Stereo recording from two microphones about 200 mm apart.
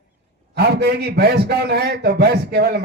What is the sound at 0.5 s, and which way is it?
A man's voice, 55° right (ahead or behind).